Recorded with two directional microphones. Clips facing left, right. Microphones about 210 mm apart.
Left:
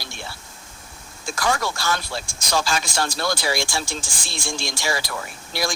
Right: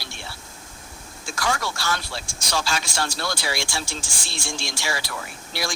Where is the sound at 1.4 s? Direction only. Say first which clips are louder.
Left 3 dB; 45° left (ahead or behind).